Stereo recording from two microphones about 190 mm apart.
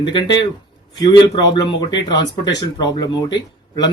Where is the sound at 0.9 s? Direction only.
20° left (ahead or behind).